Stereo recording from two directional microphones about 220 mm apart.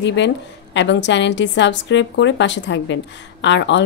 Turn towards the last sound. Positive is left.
turn(degrees=55)  # may be behind; listen again after turning